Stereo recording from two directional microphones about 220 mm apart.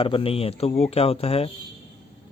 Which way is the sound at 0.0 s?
25° left (ahead or behind).